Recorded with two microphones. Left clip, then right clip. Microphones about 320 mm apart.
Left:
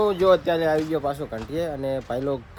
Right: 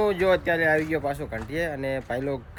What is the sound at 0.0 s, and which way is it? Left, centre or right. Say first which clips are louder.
Speech: left 3 dB; centre.